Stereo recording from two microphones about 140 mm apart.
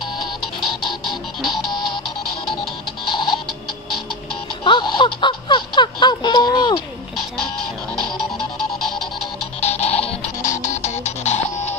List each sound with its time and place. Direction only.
0.0 s music: centre (ahead or behind)
3.1 s a sound: 35° left (ahead or behind)
4.6 s a sound: 35° left (ahead or behind)
8.7 s music: 5° left (ahead or behind)
9.6 s music: 50° left (ahead or behind)
10.4 s music: 20° left (ahead or behind)
10.7 s music: 55° left (ahead or behind)